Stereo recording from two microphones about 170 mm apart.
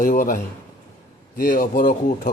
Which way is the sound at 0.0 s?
50° left (ahead or behind).